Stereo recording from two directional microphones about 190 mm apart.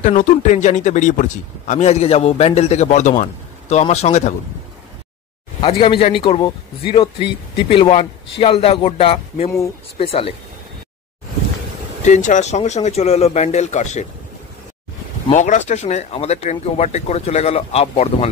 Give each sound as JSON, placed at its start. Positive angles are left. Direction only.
{"t": 0.0, "sound": "speech", "side_deg": 40}
{"t": 5.6, "sound": "a man's voice", "side_deg": 25}
{"t": 12.0, "sound": "speech", "side_deg": 40}
{"t": 15.3, "sound": "speech", "side_deg": 40}